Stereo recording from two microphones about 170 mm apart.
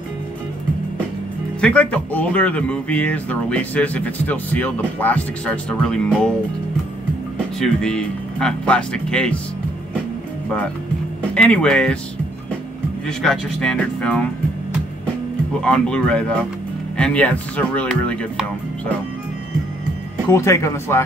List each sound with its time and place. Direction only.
1.6 s speech: 5° left (ahead or behind)
7.3 s speech: 5° left (ahead or behind)
11.3 s speech: 5° left (ahead or behind)
13.0 s speech: 5° left (ahead or behind)
15.6 s speech: 5° left (ahead or behind)
20.2 s speech: 15° left (ahead or behind)